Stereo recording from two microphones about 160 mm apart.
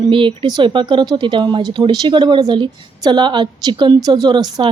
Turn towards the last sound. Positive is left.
turn(degrees=-30)  # may be behind; listen again after turning